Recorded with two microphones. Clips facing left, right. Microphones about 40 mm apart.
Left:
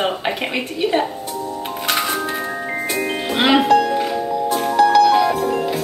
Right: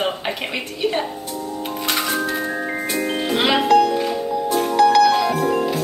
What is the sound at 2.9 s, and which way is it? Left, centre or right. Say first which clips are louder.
Music: left 1 dB; left.